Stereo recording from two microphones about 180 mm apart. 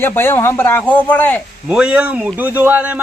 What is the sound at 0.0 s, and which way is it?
Speech, 15° left (ahead or behind).